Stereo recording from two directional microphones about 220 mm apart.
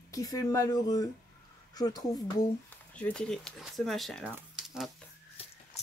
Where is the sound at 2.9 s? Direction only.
5° left (ahead or behind).